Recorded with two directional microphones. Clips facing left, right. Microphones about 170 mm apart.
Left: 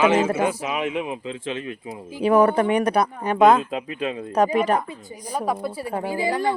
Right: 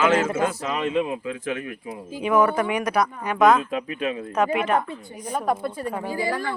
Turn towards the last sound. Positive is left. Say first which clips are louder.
# left 3 dB
turn(degrees=15)  # may be behind; listen again after turning